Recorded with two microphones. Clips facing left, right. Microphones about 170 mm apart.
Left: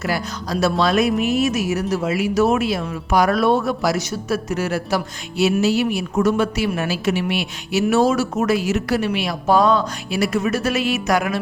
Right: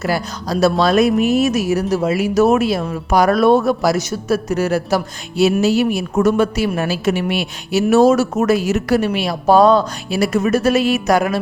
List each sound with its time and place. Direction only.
0.0 s speech: 35° right (ahead or behind)